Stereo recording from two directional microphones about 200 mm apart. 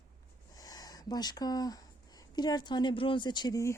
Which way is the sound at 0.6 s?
20° left (ahead or behind).